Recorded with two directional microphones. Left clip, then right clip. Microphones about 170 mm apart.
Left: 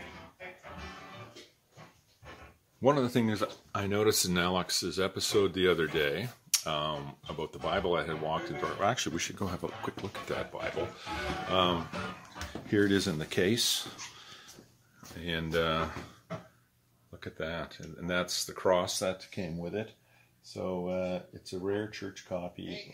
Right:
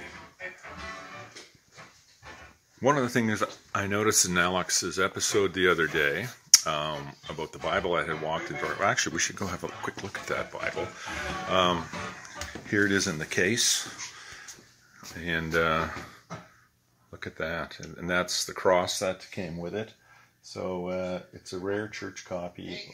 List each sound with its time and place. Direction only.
2.8 s speech: 5° right (ahead or behind)
15.1 s speech: 20° right (ahead or behind)